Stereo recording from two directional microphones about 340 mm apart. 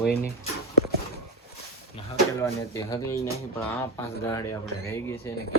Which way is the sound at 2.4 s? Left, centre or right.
Centre.